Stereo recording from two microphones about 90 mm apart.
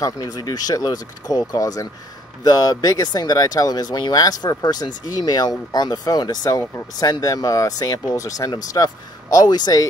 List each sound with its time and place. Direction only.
0.0 s speech: 45° left (ahead or behind)